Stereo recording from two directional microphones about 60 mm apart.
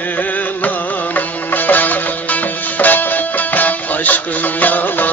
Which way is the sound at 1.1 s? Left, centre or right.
Left.